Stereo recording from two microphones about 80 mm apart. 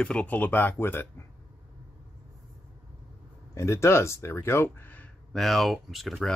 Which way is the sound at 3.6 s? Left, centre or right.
Left.